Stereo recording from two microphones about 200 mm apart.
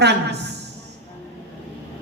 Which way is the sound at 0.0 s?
55° right (ahead or behind).